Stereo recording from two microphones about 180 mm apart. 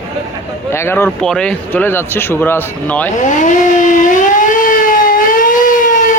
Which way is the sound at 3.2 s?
45° left (ahead or behind).